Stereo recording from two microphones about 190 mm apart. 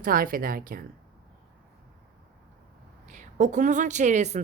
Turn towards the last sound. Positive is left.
turn(degrees=-40)  # may be behind; listen again after turning